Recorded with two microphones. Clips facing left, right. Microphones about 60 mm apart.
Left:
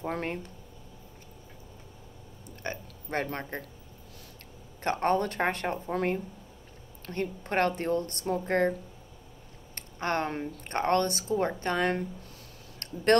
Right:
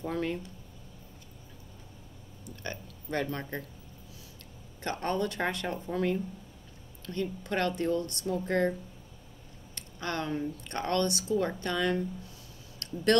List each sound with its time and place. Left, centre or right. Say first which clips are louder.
0.0 s a woman's voice: even; left
2.6 s a woman's voice: left 3 dB; left
4.8 s a woman's voice: left 4 dB; left
9.8 s a sound: left 5 dB; left
10.6 s a woman's voice: left 5 dB; left
12.7 s a sound: left 2 dB; left